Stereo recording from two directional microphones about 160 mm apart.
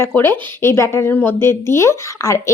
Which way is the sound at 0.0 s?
15° left (ahead or behind).